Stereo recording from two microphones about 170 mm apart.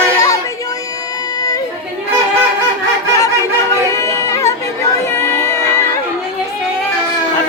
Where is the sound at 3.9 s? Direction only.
15° left (ahead or behind).